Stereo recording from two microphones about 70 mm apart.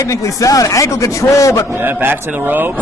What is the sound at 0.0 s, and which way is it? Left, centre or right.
A man's voice, left.